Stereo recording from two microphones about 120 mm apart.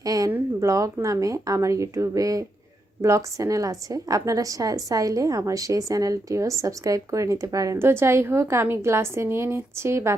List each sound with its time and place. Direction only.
0.0 s a sound: 30° right (ahead or behind)
0.3 s speech: 15° right (ahead or behind)
0.7 s a woman's voice: 25° right (ahead or behind)